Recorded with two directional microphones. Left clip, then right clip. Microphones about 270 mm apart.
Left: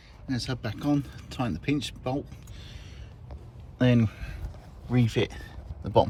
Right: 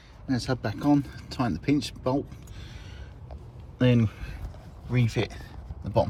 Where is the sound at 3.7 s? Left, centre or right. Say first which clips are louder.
Even; centre.